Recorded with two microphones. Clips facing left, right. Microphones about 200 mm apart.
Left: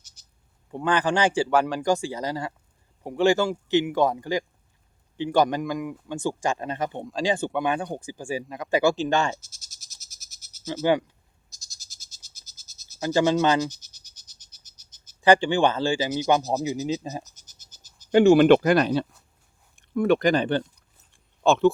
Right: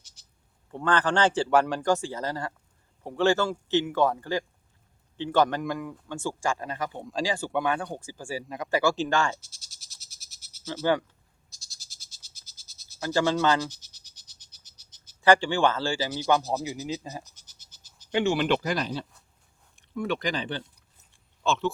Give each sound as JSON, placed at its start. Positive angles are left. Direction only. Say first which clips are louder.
{"t": 0.2, "sound": "a sound", "louder": "even", "side_deg": 45}
{"t": 0.7, "sound": "a man's voice", "louder": "left 2 dB", "side_deg": 15}
{"t": 1.5, "sound": "speech", "louder": "even", "side_deg": 0}
{"t": 1.8, "sound": "a man's voice", "louder": "left 2 dB", "side_deg": 15}
{"t": 8.4, "sound": "speech", "louder": "even", "side_deg": 0}
{"t": 8.7, "sound": "speech", "louder": "left 3 dB", "side_deg": 20}
{"t": 9.4, "sound": "frog", "louder": "even", "side_deg": 45}
{"t": 13.0, "sound": "speech", "louder": "left 4 dB", "side_deg": 20}
{"t": 13.7, "sound": "frog", "louder": "left 5 dB", "side_deg": 45}
{"t": 15.2, "sound": "a man's voice", "louder": "left 2 dB", "side_deg": 15}
{"t": 17.2, "sound": "a sound", "louder": "left 2 dB", "side_deg": 45}
{"t": 19.7, "sound": "speech", "louder": "left 9 dB", "side_deg": 50}